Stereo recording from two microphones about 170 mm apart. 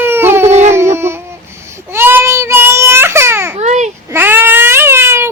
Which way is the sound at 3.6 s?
40° right (ahead or behind).